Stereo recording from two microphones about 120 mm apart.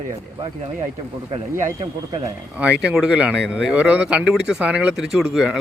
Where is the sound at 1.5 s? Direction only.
25° right (ahead or behind).